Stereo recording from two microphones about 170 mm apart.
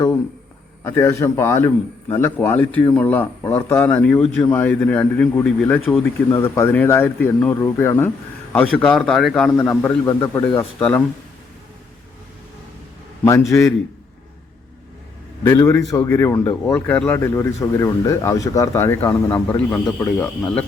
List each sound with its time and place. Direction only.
0.9 s a man's voice: 15° left (ahead or behind)
6.3 s a man's voice: 15° left (ahead or behind)
13.5 s a man's voice: 15° left (ahead or behind)
15.4 s a man's voice: 15° left (ahead or behind)